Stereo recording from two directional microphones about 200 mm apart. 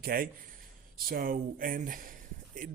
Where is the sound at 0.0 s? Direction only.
50° right (ahead or behind).